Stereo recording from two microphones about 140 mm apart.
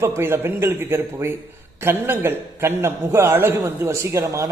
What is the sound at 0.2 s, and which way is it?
Speech, 15° right (ahead or behind).